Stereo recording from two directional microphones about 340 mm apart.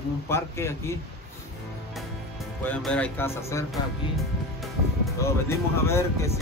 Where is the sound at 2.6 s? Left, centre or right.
Centre.